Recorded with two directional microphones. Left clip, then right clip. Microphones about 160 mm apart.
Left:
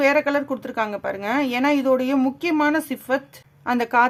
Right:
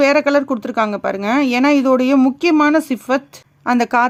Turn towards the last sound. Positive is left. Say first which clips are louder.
# right 4 dB
turn(degrees=-30)  # may be behind; listen again after turning